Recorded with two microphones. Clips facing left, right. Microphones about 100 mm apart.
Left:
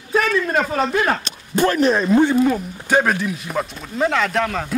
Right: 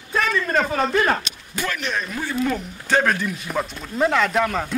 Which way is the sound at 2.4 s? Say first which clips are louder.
Left 5 dB; 10° left (ahead or behind).